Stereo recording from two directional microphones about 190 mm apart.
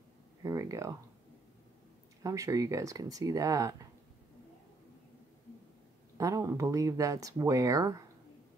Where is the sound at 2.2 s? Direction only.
15° right (ahead or behind).